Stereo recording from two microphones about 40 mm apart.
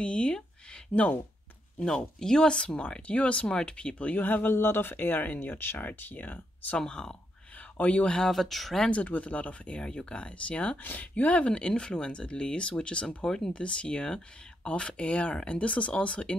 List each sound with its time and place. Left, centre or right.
0.0 s a sound: left
2.0 s speech: centre
2.8 s speech: left
4.2 s speech: left
4.6 s speech: left
6.8 s speech: centre
7.5 s speech: left
8.2 s speech: centre
8.9 s speech: left
10.8 s speech: left
11.4 s speech: left